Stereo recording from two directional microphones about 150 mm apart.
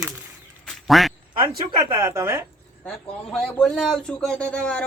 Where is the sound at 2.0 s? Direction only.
20° right (ahead or behind).